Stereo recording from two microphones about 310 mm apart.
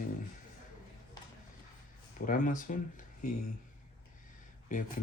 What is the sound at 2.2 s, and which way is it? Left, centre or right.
Speech, left.